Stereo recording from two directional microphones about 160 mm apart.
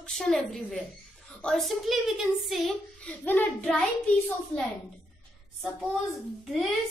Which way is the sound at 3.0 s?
10° left (ahead or behind).